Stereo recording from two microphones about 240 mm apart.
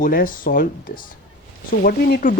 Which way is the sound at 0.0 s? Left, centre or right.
Left.